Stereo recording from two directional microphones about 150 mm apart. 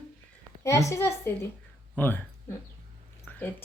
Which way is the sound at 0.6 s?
20° left (ahead or behind).